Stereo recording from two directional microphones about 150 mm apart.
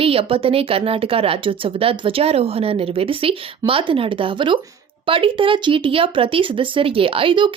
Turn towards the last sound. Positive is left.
turn(degrees=-35)  # may be behind; listen again after turning